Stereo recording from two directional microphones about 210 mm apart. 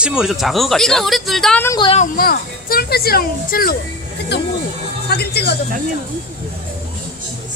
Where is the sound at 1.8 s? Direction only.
25° left (ahead or behind).